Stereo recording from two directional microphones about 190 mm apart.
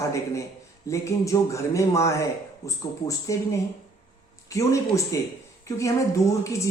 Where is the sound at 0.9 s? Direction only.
15° left (ahead or behind).